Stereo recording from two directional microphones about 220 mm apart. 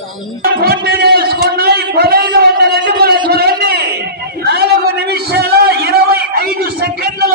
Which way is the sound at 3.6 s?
45° right (ahead or behind).